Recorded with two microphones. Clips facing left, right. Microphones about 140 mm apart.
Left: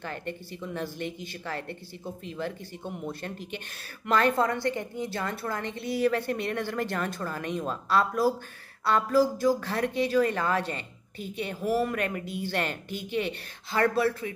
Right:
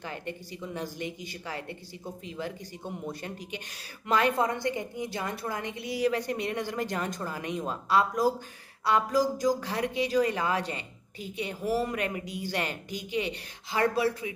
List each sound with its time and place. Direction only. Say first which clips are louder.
0.3 s a woman's voice: left 1 dB; 15° right (ahead or behind)
4.4 s a woman's voice: left 2 dB; 15° right (ahead or behind)